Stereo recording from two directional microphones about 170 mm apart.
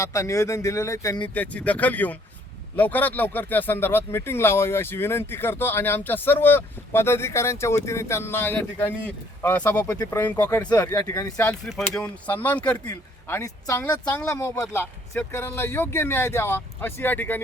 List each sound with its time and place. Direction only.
0.0 s speech: 20° left (ahead or behind)
1.3 s speech: 10° left (ahead or behind)